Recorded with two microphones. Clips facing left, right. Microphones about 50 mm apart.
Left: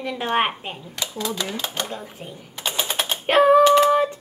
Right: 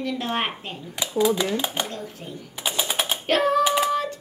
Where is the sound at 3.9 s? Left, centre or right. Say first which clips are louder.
Left 6 dB; left.